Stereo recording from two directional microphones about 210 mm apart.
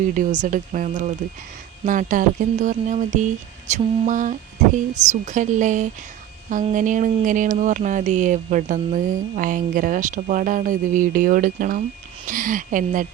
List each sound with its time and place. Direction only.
0.1 s speech: 35° right (ahead or behind)